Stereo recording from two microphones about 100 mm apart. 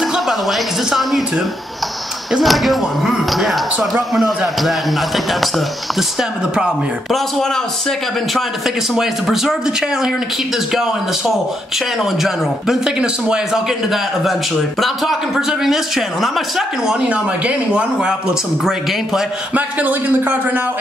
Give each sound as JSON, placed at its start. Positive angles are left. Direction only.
{"t": 0.0, "sound": "speech", "side_deg": 0}
{"t": 2.3, "sound": "a man's voice", "side_deg": 0}
{"t": 6.5, "sound": "a man's voice", "side_deg": -5}
{"t": 8.9, "sound": "a man's voice", "side_deg": -5}
{"t": 14.8, "sound": "a man's voice", "side_deg": -5}
{"t": 19.5, "sound": "a man's voice", "side_deg": -15}